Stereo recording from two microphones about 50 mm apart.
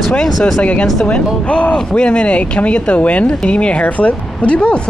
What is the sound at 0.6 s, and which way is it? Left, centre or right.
Speech, left.